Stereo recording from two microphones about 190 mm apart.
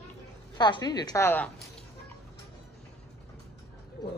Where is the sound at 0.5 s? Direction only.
20° left (ahead or behind).